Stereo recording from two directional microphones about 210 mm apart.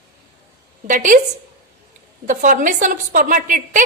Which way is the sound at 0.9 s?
40° right (ahead or behind).